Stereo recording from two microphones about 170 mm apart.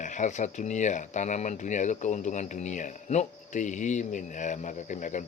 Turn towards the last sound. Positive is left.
turn(degrees=45)  # may be behind; listen again after turning